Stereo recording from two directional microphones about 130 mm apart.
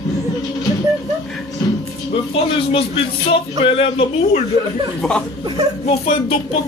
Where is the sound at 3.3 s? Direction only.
45° left (ahead or behind).